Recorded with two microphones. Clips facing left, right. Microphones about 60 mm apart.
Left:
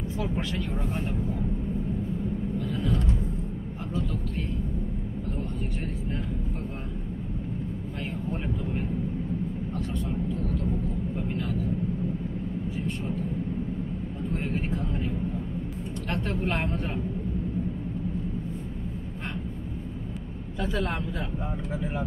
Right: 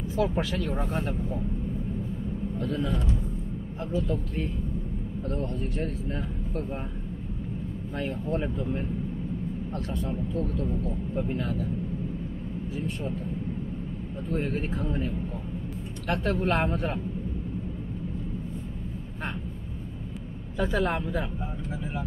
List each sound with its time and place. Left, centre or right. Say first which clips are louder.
0.2 s speech: right 5 dB; centre
3.9 s speech: right 3 dB; centre
14.3 s speech: right 2 dB; centre
16.1 s speech: right 4 dB; centre